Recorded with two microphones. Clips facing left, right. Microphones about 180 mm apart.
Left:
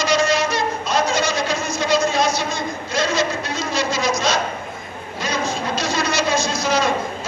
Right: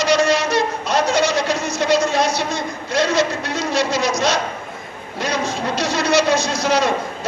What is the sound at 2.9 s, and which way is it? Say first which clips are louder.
A man's voice: right 3 dB; 70° right (ahead or behind).